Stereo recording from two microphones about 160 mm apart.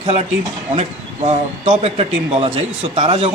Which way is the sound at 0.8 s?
40° right (ahead or behind).